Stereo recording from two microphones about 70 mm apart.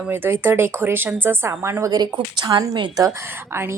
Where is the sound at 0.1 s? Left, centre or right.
Right.